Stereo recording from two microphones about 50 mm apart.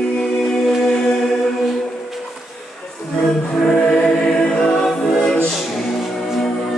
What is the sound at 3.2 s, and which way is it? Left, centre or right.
Music, centre.